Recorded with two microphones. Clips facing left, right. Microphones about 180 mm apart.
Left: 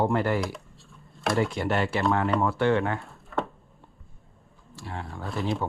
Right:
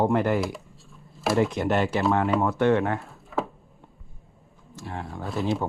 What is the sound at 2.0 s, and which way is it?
Speech, centre (ahead or behind).